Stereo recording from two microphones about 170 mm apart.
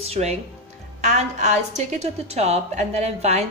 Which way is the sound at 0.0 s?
40° right (ahead or behind).